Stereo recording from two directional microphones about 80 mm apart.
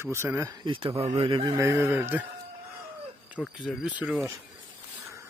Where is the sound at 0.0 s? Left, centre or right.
Right.